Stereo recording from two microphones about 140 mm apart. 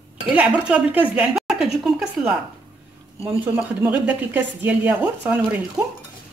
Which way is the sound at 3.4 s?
15° right (ahead or behind).